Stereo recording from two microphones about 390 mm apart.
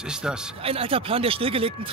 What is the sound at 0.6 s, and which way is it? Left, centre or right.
Speech, centre.